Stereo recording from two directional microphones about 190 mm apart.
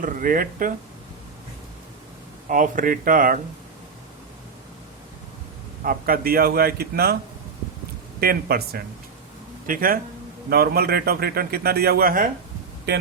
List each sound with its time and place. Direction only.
0.0 s a man's voice: 45° right (ahead or behind)
2.5 s a man's voice: 45° right (ahead or behind)
5.8 s a man's voice: 50° right (ahead or behind)
8.2 s a man's voice: 55° right (ahead or behind)